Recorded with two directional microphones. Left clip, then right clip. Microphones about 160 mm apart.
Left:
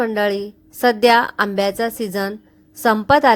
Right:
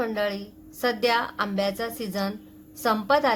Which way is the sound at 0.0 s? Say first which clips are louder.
Left 8 dB; 50° left (ahead or behind).